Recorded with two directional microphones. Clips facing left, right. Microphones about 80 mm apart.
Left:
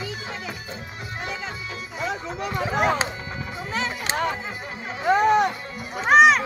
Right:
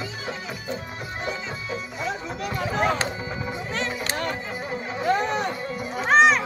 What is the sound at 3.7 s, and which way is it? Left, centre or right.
Music, centre.